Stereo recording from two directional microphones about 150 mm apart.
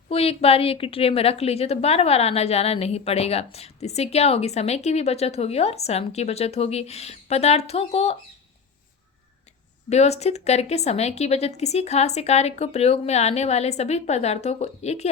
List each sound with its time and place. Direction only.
0.1 s a woman's voice: 40° left (ahead or behind)
9.9 s a woman's voice: 45° left (ahead or behind)